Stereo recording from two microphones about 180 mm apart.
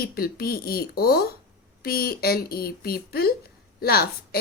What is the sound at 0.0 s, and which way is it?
A woman's voice, 60° left (ahead or behind).